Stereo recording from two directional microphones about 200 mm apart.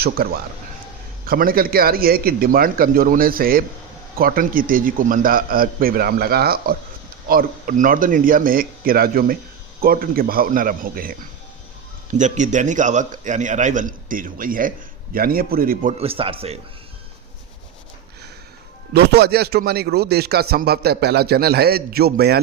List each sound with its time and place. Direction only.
0.0 s a man's voice: 50° right (ahead or behind); by 16.6 s 30° right (ahead or behind)
18.9 s a man's voice: 55° right (ahead or behind)